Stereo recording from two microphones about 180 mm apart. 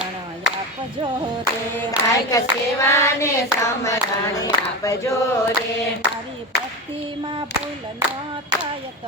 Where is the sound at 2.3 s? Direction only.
15° left (ahead or behind).